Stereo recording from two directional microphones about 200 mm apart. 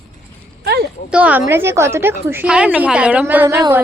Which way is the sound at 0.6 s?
55° right (ahead or behind).